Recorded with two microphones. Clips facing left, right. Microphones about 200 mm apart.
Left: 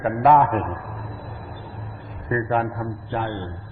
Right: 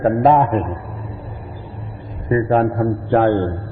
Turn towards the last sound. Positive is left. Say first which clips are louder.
# right 13 dB
turn(degrees=-60)  # may be behind; listen again after turning